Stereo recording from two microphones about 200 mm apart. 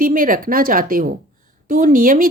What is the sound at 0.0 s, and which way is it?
Speech, 45° right (ahead or behind).